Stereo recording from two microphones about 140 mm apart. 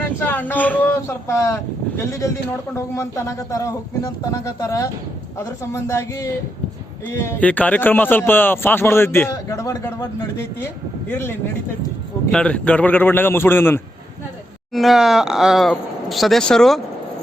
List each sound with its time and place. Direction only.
0.2 s a man's voice: 15° left (ahead or behind)
14.7 s speech: centre (ahead or behind)